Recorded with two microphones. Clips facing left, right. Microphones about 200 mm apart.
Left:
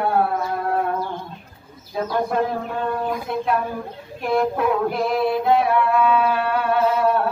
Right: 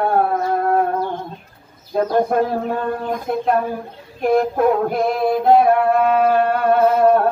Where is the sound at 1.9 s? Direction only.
50° right (ahead or behind).